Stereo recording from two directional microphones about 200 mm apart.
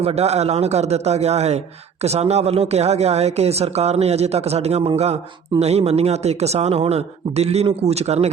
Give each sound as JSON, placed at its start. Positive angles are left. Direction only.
{"t": 0.0, "sound": "a man's voice", "side_deg": -30}